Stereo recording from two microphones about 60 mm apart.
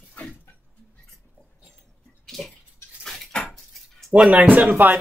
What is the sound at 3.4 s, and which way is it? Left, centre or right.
Cutlery, centre.